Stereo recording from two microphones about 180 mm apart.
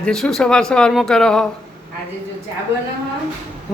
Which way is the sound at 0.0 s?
5° left (ahead or behind).